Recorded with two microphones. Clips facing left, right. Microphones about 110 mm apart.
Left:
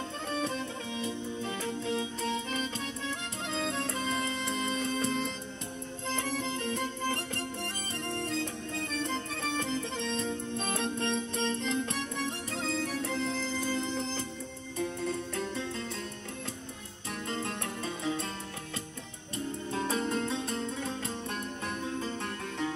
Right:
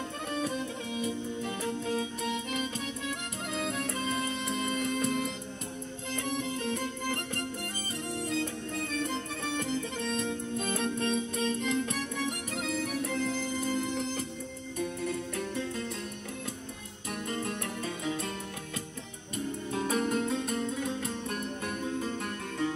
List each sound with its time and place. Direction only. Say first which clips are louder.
0.9 s music: right 2 dB; 30° left (ahead or behind)
6.4 s music: even; 30° left (ahead or behind)
9.0 s music: even; 30° left (ahead or behind)
17.3 s music: even; 30° left (ahead or behind)
19.3 s music: right 1 dB; 30° left (ahead or behind)